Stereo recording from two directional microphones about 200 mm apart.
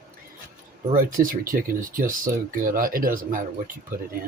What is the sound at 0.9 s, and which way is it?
Speech, 45° right (ahead or behind).